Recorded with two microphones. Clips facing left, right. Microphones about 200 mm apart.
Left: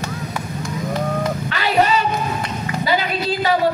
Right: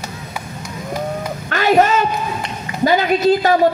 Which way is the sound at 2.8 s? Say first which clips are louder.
Right 8 dB; 45° right (ahead or behind).